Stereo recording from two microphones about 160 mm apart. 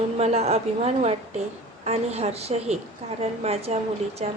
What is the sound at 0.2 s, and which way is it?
A woman's voice, 40° right (ahead or behind).